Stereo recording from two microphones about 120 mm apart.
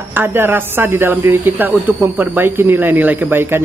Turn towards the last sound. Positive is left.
turn(degrees=-20)  # may be behind; listen again after turning